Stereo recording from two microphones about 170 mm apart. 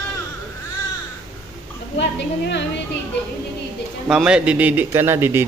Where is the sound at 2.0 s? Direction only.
90° left.